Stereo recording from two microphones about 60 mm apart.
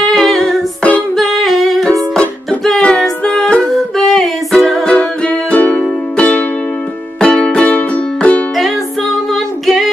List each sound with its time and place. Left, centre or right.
0.0 s music: centre
1.1 s humming: centre
1.9 s music: centre
9.3 s female singing: centre